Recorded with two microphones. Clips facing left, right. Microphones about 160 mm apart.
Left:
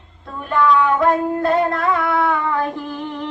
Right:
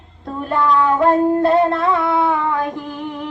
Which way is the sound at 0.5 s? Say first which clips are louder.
Even; 35° right (ahead or behind).